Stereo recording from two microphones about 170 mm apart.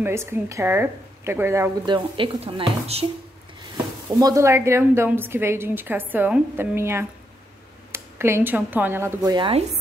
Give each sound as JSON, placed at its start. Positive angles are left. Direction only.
{"t": 0.0, "sound": "a woman's voice", "side_deg": -15}
{"t": 1.9, "sound": "speech", "side_deg": -30}
{"t": 4.2, "sound": "a woman's voice", "side_deg": -20}